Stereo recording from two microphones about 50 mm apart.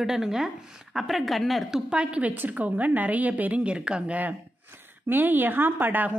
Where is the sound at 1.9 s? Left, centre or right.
Right.